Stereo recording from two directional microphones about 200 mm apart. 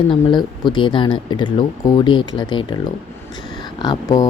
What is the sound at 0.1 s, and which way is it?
Speech, 25° left (ahead or behind).